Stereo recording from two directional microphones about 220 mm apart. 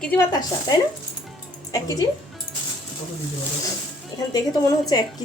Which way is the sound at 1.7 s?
15° left (ahead or behind).